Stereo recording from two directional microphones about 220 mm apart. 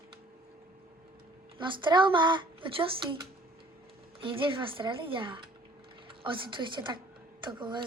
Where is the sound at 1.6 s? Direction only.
20° right (ahead or behind).